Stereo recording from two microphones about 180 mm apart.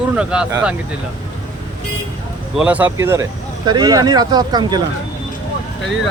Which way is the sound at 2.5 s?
10° right (ahead or behind).